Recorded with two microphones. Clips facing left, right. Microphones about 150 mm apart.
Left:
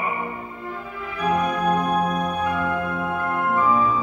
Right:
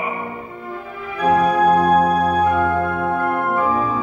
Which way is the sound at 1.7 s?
55° right (ahead or behind).